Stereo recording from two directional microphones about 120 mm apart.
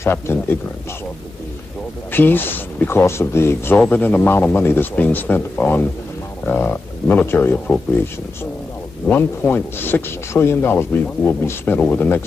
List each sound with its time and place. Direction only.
0.0 s a man's voice: 20° left (ahead or behind)
2.1 s speech: 15° left (ahead or behind)
9.1 s speech: 15° left (ahead or behind)